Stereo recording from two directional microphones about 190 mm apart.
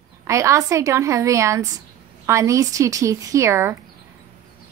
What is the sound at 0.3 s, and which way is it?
A woman's voice, 15° right (ahead or behind).